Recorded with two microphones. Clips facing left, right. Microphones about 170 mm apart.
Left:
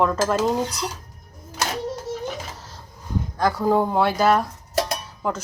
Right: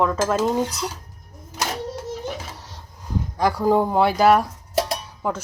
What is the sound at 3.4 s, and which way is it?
Speech, 10° right (ahead or behind).